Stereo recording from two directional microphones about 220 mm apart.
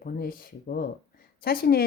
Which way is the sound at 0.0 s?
40° left (ahead or behind).